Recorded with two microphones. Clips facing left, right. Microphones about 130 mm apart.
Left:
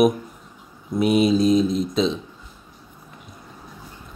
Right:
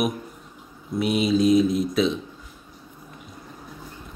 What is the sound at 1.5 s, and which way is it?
Speech, 10° right (ahead or behind).